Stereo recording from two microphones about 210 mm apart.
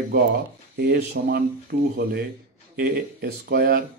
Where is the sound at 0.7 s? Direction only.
45° right (ahead or behind).